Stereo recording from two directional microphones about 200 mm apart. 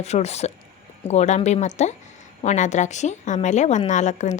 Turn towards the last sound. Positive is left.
turn(degrees=35)  # may be behind; listen again after turning